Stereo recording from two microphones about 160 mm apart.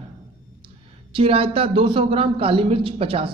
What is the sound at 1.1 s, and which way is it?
Speech, 35° right (ahead or behind).